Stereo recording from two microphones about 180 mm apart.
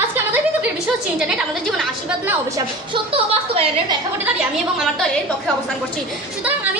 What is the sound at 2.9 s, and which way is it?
A woman's voice, 30° right (ahead or behind).